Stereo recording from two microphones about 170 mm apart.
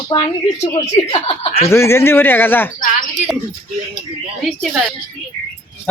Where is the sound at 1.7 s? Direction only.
15° left (ahead or behind).